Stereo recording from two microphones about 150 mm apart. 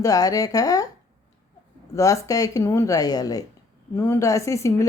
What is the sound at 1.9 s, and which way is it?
Speech, 20° left (ahead or behind).